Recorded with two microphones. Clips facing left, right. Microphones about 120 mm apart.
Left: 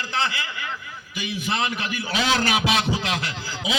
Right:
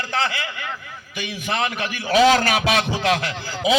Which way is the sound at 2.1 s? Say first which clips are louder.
Right 8 dB; 45° right (ahead or behind).